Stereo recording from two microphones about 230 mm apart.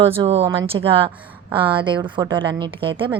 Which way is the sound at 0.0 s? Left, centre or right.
Right.